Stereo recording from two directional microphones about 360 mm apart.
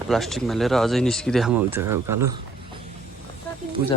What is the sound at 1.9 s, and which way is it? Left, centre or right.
Speech, right.